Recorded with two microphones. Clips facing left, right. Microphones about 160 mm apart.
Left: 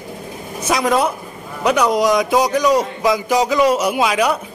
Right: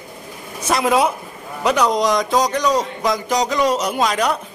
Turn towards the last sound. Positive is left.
turn(degrees=5)  # may be behind; listen again after turning